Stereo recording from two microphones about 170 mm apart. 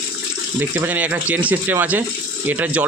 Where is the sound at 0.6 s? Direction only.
10° right (ahead or behind).